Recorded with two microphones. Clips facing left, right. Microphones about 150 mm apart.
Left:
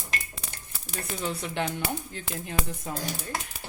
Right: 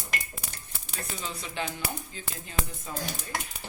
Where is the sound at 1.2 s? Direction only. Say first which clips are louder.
Left 5 dB; 60° left (ahead or behind).